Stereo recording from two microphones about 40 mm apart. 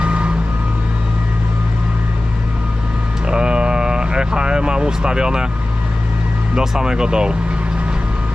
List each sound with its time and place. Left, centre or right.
0.0 s vehicle: right
3.2 s a sound: right
6.5 s speech: centre